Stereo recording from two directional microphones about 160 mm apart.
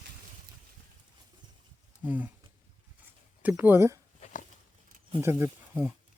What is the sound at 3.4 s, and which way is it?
Speech, 10° right (ahead or behind).